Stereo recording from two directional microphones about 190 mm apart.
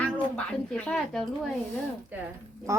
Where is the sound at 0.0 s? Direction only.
5° left (ahead or behind).